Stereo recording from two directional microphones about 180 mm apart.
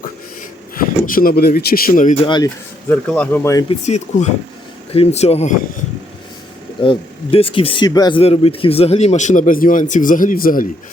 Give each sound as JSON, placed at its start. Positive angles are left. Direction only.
{"t": 0.8, "sound": "speech", "side_deg": 50}
{"t": 2.2, "sound": "speech", "side_deg": 25}
{"t": 2.9, "sound": "speech", "side_deg": 10}
{"t": 3.7, "sound": "speech", "side_deg": 40}
{"t": 6.8, "sound": "speech", "side_deg": 30}
{"t": 8.2, "sound": "speech", "side_deg": 35}